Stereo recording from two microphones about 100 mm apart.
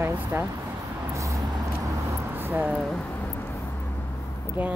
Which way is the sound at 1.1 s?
35° right (ahead or behind).